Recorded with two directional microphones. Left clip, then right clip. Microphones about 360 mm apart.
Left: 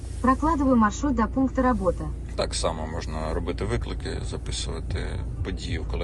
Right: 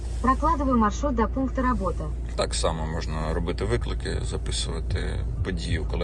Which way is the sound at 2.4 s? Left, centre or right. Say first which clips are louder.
Right 1 dB; centre.